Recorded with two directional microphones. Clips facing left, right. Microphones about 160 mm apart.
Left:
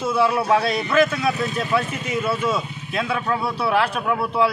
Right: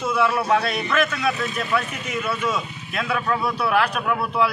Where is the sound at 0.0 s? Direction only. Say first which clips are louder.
Left 2 dB; 30° left (ahead or behind).